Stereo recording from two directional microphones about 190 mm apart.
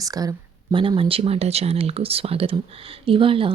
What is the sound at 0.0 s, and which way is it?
Speech, 20° right (ahead or behind).